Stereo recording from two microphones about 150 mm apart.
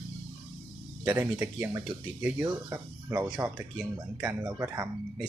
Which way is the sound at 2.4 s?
25° right (ahead or behind).